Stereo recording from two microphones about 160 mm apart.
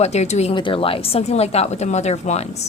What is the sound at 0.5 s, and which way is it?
Speech, 30° left (ahead or behind).